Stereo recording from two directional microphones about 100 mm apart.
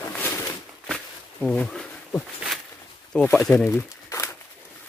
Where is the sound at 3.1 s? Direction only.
10° left (ahead or behind).